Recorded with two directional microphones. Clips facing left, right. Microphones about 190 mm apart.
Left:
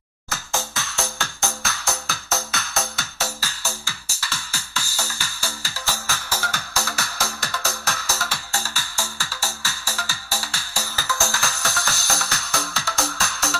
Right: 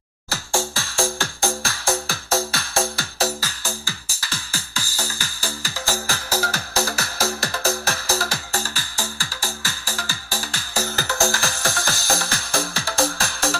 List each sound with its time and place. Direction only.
0.3 s music: 30° right (ahead or behind)
11.2 s music: 30° right (ahead or behind)